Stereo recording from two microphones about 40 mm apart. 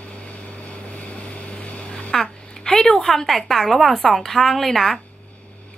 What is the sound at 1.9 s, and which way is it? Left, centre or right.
A woman's voice, centre.